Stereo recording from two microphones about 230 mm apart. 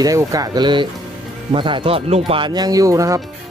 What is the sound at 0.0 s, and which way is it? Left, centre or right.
Speech, centre.